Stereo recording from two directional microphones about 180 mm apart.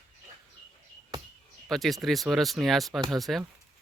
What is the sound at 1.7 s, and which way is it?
Speech, centre (ahead or behind).